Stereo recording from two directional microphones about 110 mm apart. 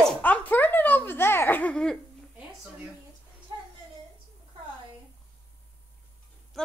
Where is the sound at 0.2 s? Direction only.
15° left (ahead or behind).